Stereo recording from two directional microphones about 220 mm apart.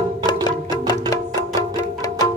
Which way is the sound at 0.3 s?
15° left (ahead or behind).